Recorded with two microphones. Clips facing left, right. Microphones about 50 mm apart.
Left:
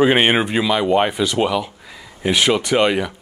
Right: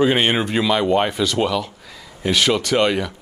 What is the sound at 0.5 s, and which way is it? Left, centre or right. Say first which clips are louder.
Speech: left 1 dB; centre.